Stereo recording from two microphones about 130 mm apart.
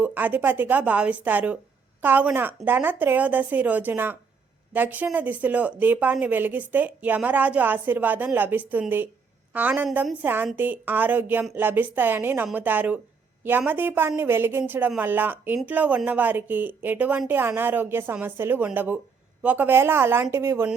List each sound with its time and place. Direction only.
0.0 s speech: 15° right (ahead or behind)